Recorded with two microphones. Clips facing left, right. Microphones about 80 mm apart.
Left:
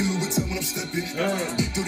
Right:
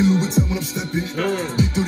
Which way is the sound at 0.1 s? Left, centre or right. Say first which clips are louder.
Right 7 dB; right.